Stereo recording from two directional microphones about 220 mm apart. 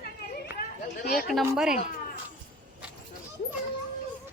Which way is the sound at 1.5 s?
5° right (ahead or behind).